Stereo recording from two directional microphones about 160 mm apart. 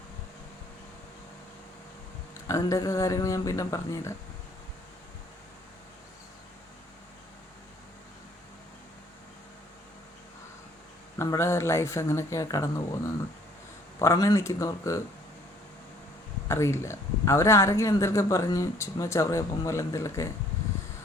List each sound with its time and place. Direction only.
2.5 s speech: 20° left (ahead or behind)
11.2 s speech: 20° left (ahead or behind)
16.5 s speech: 15° left (ahead or behind)